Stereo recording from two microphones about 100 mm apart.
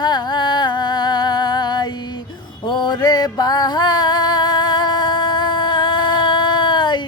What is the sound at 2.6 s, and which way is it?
Music, 50° left (ahead or behind).